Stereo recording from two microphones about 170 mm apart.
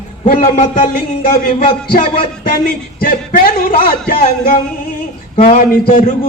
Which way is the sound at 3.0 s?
60° left (ahead or behind).